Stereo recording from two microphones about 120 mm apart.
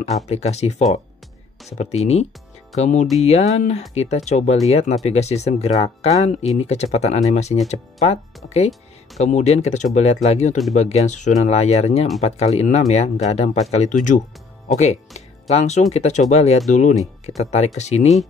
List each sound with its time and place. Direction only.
0.3 s speech: 65° left (ahead or behind)
2.8 s speech: 90° left
3.2 s speech: 65° left (ahead or behind)
4.6 s speech: 65° left (ahead or behind); by 14.2 s 90° left
14.7 s speech: 70° left (ahead or behind)
17.4 s speech: 65° left (ahead or behind)